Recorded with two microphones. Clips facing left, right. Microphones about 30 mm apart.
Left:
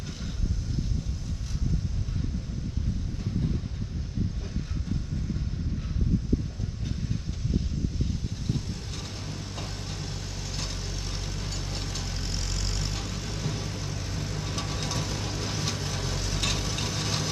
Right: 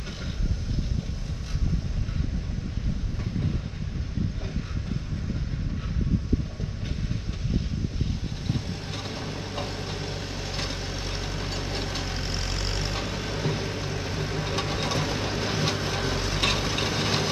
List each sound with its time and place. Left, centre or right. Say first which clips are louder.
8.5 s vehicle: right 3 dB; right